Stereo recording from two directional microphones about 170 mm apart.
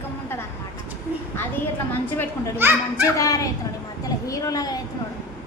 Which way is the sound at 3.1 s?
20° left (ahead or behind).